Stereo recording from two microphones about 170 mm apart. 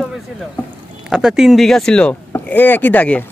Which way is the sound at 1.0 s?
5° right (ahead or behind).